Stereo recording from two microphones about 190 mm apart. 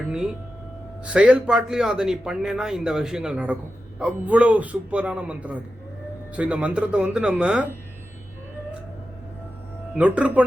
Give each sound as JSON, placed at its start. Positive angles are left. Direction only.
{"t": 1.0, "sound": "a man's voice", "side_deg": -5}
{"t": 9.9, "sound": "speech", "side_deg": -5}